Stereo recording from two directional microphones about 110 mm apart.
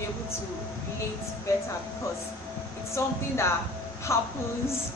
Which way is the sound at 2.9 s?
25° left (ahead or behind).